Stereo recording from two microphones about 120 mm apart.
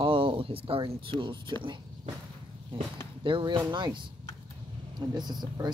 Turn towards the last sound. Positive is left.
turn(degrees=-35)  # may be behind; listen again after turning